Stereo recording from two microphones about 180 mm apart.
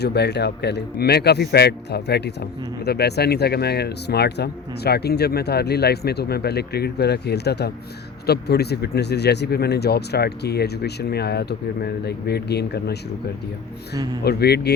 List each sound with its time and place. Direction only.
0.0 s a man's voice: 65° left (ahead or behind)
14.3 s a man's voice: 65° left (ahead or behind)